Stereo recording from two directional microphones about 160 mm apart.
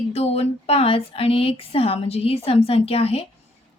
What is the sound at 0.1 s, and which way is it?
Speech, 40° left (ahead or behind).